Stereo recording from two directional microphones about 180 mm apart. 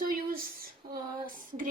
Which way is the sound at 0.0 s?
55° right (ahead or behind).